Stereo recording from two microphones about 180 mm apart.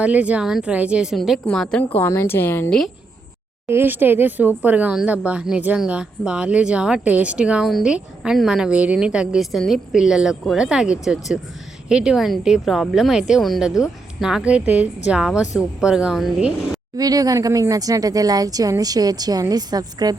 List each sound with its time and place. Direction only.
0.0 s speech: 5° right (ahead or behind)
3.7 s speech: 10° right (ahead or behind)
17.0 s a woman's voice: 20° right (ahead or behind)